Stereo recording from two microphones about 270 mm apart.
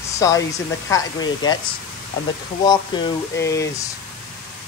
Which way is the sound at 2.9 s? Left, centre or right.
Centre.